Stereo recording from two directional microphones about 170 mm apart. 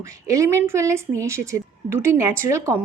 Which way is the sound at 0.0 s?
20° right (ahead or behind).